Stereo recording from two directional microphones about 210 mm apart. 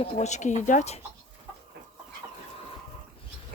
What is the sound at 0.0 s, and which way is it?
Speech, 35° left (ahead or behind).